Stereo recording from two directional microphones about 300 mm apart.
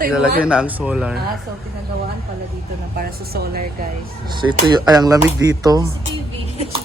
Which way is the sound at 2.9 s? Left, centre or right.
Right.